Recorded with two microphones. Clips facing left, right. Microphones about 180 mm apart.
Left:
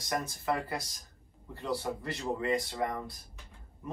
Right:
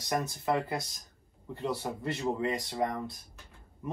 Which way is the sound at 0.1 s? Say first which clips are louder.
Right 3 dB; 20° right (ahead or behind).